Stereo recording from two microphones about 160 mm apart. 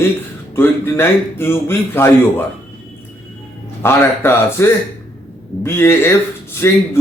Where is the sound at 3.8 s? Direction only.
15° left (ahead or behind).